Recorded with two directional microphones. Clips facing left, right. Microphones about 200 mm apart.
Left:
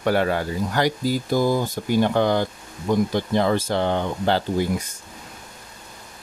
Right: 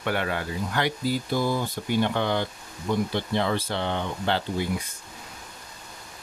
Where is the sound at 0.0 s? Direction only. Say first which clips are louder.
Left 7 dB; 40° left (ahead or behind).